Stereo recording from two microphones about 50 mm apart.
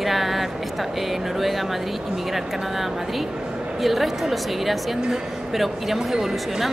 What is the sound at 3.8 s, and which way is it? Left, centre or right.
A woman's voice, centre.